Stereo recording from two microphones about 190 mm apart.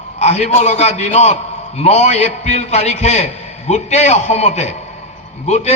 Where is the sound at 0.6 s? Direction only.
35° left (ahead or behind).